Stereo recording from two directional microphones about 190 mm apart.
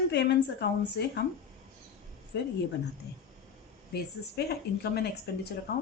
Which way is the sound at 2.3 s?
60° left (ahead or behind).